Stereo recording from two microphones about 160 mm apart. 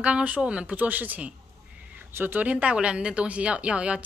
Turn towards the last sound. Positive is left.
turn(degrees=-5)  # may be behind; listen again after turning